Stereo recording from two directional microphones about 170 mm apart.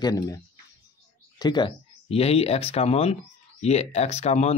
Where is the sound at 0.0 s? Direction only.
20° left (ahead or behind).